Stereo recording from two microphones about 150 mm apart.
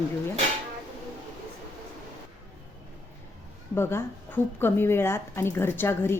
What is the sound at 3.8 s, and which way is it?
A woman's voice, 15° left (ahead or behind).